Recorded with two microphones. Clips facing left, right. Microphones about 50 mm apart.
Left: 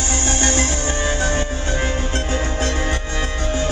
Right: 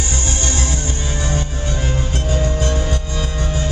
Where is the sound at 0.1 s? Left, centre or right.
Left.